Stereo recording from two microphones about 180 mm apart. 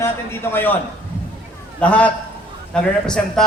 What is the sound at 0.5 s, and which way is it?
Speech, 10° left (ahead or behind).